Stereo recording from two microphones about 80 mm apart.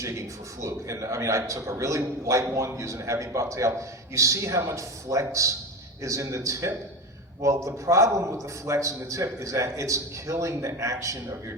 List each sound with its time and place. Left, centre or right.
0.0 s a man's voice: right